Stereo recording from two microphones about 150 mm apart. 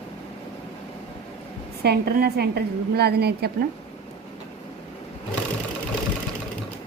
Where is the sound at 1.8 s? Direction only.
90° right.